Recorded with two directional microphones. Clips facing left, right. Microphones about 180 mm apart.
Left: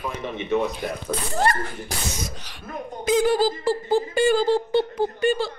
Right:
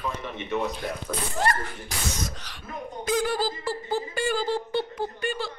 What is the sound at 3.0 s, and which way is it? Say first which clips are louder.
Speech: left 7 dB; 20° left (ahead or behind).